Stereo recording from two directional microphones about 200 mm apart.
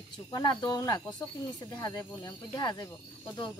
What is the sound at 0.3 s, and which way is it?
Speech, 20° left (ahead or behind).